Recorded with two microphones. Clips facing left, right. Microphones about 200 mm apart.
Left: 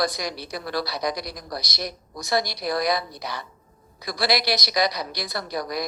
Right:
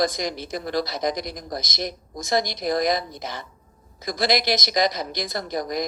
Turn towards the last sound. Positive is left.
turn(degrees=-45)  # may be behind; listen again after turning